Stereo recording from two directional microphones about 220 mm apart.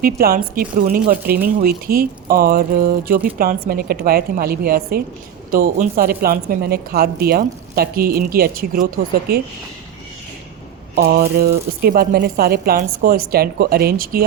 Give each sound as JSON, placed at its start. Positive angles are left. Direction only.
{"t": 0.0, "sound": "speech", "side_deg": -40}
{"t": 10.9, "sound": "speech", "side_deg": -45}